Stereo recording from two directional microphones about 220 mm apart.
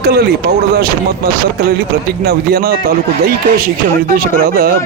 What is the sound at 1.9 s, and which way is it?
Speech, 45° right (ahead or behind).